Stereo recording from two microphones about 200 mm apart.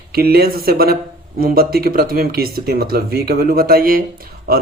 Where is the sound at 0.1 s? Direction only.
50° right (ahead or behind).